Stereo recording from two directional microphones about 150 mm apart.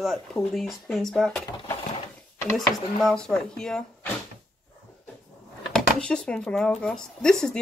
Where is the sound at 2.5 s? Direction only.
Centre (ahead or behind).